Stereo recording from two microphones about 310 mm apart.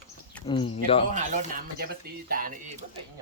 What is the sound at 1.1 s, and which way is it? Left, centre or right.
Speech, right.